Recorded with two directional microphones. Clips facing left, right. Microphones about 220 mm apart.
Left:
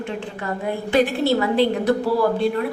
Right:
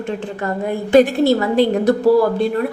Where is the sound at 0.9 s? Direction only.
45° right (ahead or behind).